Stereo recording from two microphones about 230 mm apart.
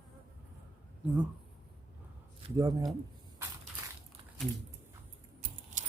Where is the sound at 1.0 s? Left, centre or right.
Centre.